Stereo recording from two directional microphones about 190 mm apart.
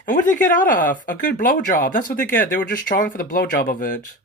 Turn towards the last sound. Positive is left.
turn(degrees=45)  # may be behind; listen again after turning